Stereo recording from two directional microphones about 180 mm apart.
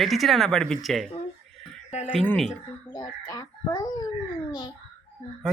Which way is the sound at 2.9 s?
20° left (ahead or behind).